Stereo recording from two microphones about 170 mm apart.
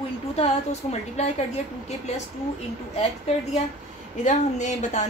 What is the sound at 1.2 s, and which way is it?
Speech, 40° left (ahead or behind).